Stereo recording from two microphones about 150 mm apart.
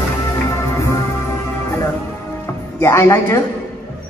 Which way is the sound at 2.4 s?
20° left (ahead or behind).